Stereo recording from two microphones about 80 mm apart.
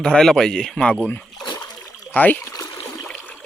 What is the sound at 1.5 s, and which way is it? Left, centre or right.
Splash, left.